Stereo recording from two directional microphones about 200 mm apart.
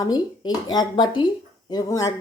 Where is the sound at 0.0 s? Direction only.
20° left (ahead or behind).